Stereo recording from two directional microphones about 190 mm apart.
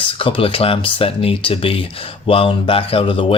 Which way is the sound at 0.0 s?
30° left (ahead or behind).